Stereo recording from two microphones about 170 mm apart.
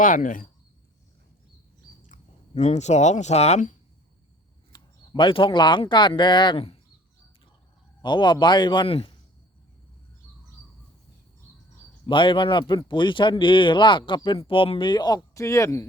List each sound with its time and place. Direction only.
0.0 s speech: 50° left (ahead or behind)
2.1 s chewing: 45° left (ahead or behind)
2.6 s speech: 40° left (ahead or behind)
4.7 s speech: 30° left (ahead or behind)
8.0 s speech: 25° left (ahead or behind)
12.0 s speech: 30° left (ahead or behind)